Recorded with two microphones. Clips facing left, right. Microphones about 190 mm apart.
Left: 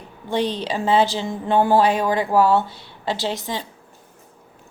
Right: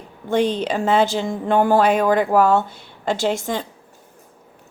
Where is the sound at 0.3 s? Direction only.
50° right (ahead or behind).